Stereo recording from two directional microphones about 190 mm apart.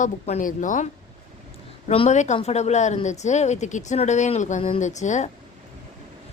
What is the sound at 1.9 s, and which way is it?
A woman's voice, 35° left (ahead or behind).